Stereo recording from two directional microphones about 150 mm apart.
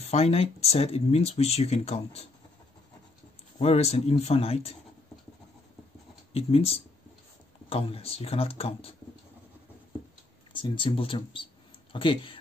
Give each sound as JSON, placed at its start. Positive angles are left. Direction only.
{"t": 0.0, "sound": "speech", "side_deg": 45}
{"t": 3.5, "sound": "a man's voice", "side_deg": 45}
{"t": 6.3, "sound": "speech", "side_deg": 40}
{"t": 10.5, "sound": "speech", "side_deg": 35}